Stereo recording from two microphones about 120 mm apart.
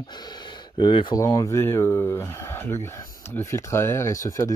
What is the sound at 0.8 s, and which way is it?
Speech, 40° left (ahead or behind).